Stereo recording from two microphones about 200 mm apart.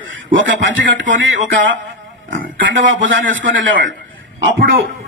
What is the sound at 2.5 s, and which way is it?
A man's voice, 70° right (ahead or behind).